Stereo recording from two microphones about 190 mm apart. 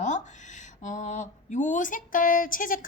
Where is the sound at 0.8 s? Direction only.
40° left (ahead or behind).